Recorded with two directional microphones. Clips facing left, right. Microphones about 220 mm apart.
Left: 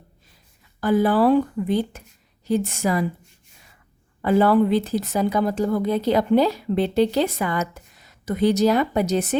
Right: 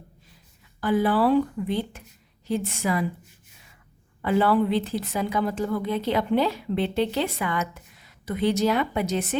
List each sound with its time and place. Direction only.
0.8 s a woman's voice: 40° left (ahead or behind)
4.2 s a woman's voice: 40° left (ahead or behind)